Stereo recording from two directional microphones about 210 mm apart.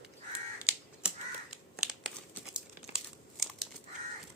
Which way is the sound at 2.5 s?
Centre (ahead or behind).